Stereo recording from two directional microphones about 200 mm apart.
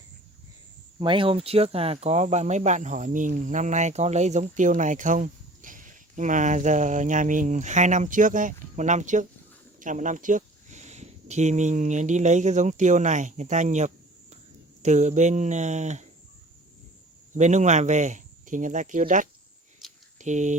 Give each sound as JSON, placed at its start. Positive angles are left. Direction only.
{"t": 0.9, "sound": "speech", "side_deg": -25}
{"t": 17.3, "sound": "speech", "side_deg": -35}